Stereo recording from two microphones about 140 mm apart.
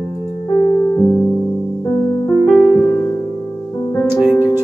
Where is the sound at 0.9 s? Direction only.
15° left (ahead or behind).